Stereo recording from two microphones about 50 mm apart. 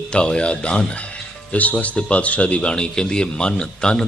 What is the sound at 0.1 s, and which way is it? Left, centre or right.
Speech, centre.